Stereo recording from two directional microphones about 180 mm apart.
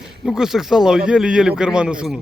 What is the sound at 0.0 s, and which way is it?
A man's voice, 5° right (ahead or behind).